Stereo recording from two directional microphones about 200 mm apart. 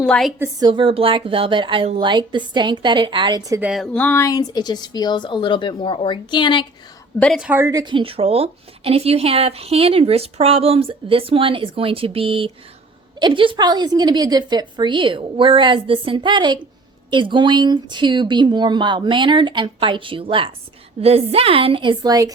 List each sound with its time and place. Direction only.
0.0 s a woman's voice: centre (ahead or behind)
0.3 s a woman's voice: 15° right (ahead or behind)
0.7 s a woman's voice: 25° right (ahead or behind)
3.6 s a woman's voice: 5° right (ahead or behind)
3.9 s a woman's voice: 10° left (ahead or behind)
7.2 s a woman's voice: centre (ahead or behind); by 22.3 s 20° right (ahead or behind)